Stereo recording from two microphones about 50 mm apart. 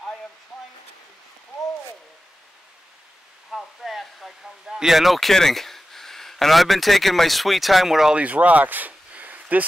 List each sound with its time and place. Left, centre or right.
3.5 s speech: centre
8.1 s speech: right